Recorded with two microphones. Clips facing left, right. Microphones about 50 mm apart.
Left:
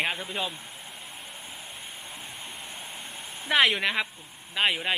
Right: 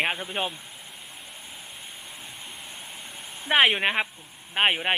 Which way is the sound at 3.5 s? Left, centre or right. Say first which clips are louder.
Right 2 dB; right.